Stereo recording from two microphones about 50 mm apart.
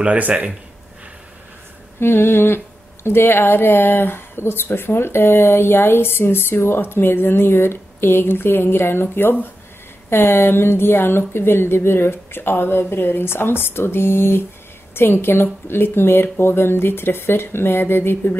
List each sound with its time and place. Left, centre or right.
0.0 s speech: right
2.0 s speech: left